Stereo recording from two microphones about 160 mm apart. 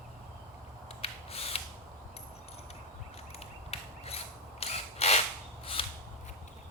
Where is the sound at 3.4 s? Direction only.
40° left (ahead or behind).